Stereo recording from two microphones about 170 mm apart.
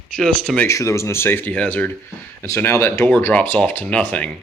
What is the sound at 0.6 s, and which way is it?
Speech, 15° left (ahead or behind).